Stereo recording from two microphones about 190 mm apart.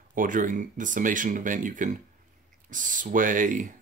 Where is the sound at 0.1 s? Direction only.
45° right (ahead or behind).